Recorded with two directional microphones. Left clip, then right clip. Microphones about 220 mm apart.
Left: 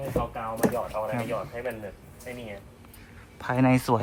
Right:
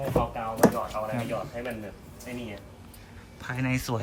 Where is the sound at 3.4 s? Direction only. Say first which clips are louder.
Left 7 dB; 5° left (ahead or behind).